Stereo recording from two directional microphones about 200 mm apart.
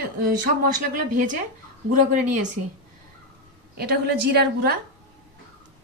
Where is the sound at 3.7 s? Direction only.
50° right (ahead or behind).